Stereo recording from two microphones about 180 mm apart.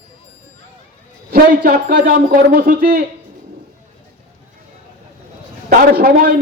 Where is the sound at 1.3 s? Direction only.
55° right (ahead or behind).